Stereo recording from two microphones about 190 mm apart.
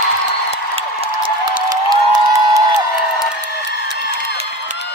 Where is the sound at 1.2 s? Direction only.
20° right (ahead or behind).